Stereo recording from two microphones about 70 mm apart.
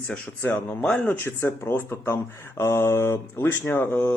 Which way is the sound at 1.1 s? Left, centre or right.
Left.